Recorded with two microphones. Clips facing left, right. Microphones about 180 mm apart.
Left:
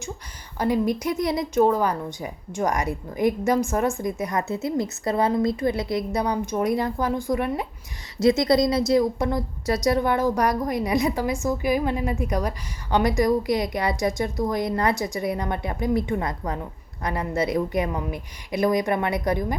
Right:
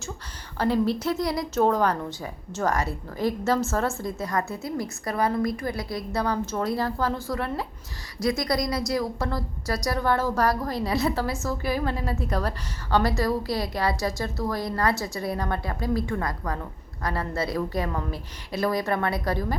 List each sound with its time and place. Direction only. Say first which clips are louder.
0.6 s a woman's voice: left 1 dB; 15° left (ahead or behind)
1.6 s a woman's voice: right 1 dB; 10° left (ahead or behind)